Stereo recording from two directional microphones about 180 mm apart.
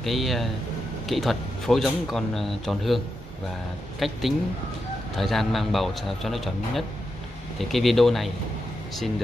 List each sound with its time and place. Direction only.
0.0 s speech: centre (ahead or behind)
4.0 s speech: centre (ahead or behind)